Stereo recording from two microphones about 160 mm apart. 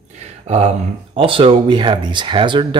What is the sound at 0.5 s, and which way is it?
Speech, 45° right (ahead or behind).